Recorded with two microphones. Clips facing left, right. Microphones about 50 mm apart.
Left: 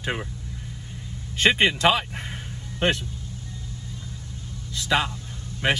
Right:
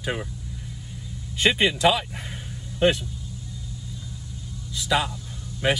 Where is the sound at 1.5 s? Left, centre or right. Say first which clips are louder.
Even; left.